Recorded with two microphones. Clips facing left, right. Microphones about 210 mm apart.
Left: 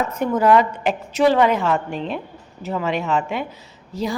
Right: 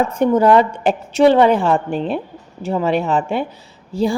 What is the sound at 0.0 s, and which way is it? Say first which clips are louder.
A woman's voice: right 5 dB; 30° right (ahead or behind).